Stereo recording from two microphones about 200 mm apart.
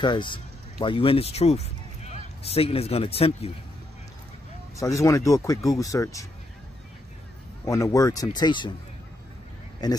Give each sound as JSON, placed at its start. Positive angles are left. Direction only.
{"t": 0.0, "sound": "speech", "side_deg": 25}
{"t": 4.7, "sound": "speech", "side_deg": 15}
{"t": 7.6, "sound": "speech", "side_deg": 15}
{"t": 9.8, "sound": "speech", "side_deg": 20}